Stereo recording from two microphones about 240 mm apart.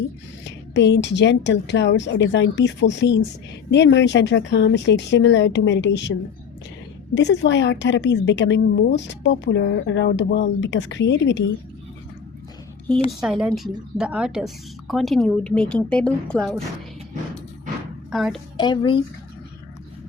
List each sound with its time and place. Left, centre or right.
0.7 s a woman's voice: left
13.2 s a woman's voice: centre
18.1 s a woman's voice: centre
18.5 s speech: centre